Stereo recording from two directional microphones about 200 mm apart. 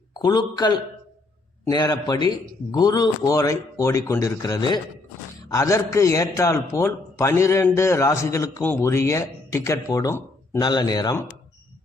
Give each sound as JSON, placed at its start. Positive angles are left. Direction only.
{"t": 0.2, "sound": "a man's voice", "side_deg": 20}